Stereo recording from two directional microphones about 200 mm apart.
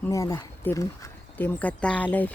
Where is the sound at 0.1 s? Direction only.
15° left (ahead or behind).